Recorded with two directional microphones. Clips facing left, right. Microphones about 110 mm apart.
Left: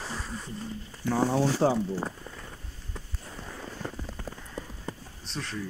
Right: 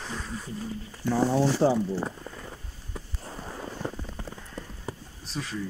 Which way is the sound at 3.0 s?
5° right (ahead or behind).